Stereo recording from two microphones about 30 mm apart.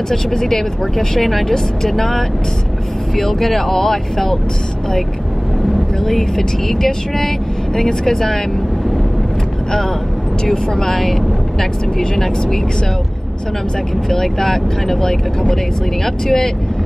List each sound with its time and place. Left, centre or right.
0.1 s speech: centre
6.0 s speech: centre
10.4 s speech: centre
14.0 s speech: centre
16.3 s speech: centre